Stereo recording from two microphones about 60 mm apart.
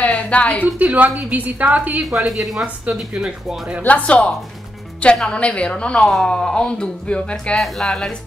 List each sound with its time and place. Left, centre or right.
0.0 s a sound: left
0.7 s a woman's voice: right
2.0 s a woman's voice: centre
3.1 s speech: centre
3.8 s speech: left
7.5 s speech: centre